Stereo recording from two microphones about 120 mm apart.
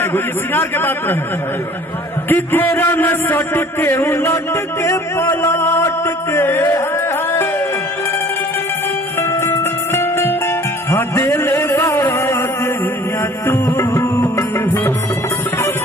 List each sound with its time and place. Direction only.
0.0 s a man's voice: 20° left (ahead or behind)
2.3 s a man's voice: 15° left (ahead or behind)
9.3 s music: 25° left (ahead or behind)